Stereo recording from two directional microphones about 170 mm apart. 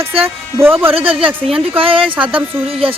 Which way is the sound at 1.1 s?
30° right (ahead or behind).